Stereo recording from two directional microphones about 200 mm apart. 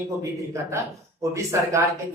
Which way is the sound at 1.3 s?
15° right (ahead or behind).